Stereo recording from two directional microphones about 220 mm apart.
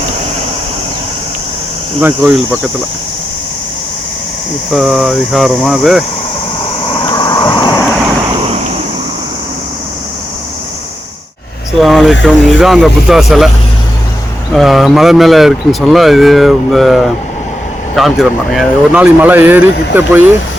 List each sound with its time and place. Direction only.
2.0 s speech: 10° right (ahead or behind)
4.7 s speech: centre (ahead or behind)
6.8 s vehicle: 20° left (ahead or behind)
11.8 s speech: centre (ahead or behind)
14.5 s speech: centre (ahead or behind)